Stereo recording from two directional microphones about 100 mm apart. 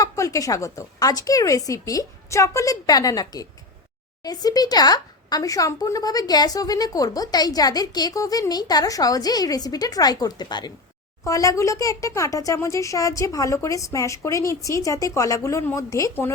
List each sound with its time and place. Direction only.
0.0 s speech: 35° left (ahead or behind)
11.2 s speech: 35° left (ahead or behind)